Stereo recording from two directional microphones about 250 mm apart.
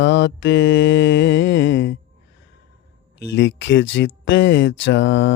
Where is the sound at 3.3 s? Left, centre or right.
Left.